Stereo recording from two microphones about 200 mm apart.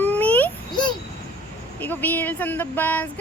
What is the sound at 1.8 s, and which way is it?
Speech, 10° left (ahead or behind).